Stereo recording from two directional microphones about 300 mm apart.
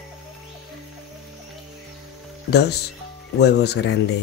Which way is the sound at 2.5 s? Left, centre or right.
Left.